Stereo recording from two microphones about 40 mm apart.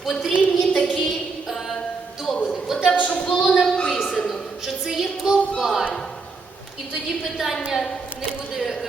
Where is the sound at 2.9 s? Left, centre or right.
Left.